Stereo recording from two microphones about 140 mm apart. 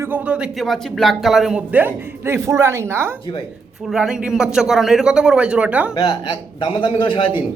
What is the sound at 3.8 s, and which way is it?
Speech, 5° right (ahead or behind).